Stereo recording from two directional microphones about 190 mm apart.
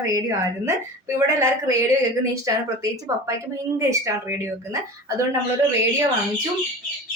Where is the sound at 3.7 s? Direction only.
15° right (ahead or behind).